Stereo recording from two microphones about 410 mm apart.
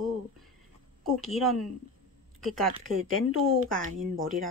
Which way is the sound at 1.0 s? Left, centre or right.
Centre.